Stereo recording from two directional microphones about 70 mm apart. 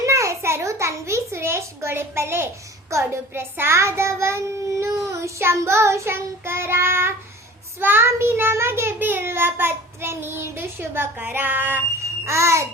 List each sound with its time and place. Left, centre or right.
0.0 s a sound: right
2.9 s a child's voice: right
12.2 s a child's voice: right